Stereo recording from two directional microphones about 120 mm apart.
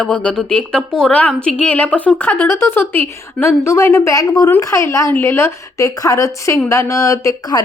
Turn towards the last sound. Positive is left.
turn(degrees=25)  # may be behind; listen again after turning